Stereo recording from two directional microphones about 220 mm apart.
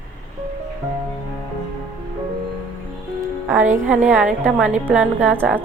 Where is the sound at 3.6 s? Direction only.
35° right (ahead or behind).